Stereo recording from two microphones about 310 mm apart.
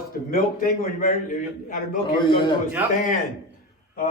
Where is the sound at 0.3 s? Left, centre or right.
Left.